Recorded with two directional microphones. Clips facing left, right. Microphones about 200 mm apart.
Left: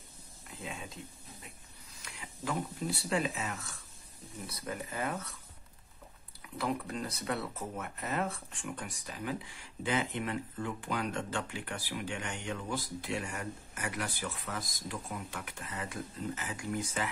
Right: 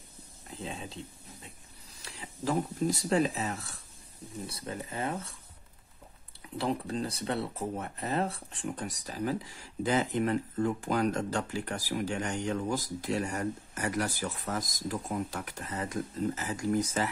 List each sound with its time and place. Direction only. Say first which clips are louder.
0.5 s a sound: right 4 dB; 30° right (ahead or behind)
2.0 s speech: right 4 dB; 35° right (ahead or behind)
6.4 s speech: right 3 dB; 30° right (ahead or behind)